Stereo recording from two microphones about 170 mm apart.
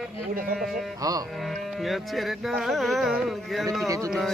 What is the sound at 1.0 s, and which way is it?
Speech, 20° right (ahead or behind).